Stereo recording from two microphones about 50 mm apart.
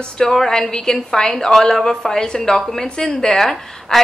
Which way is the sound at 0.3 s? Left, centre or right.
Centre.